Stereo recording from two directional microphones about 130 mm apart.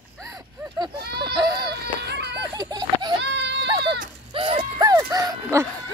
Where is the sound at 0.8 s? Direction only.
35° right (ahead or behind).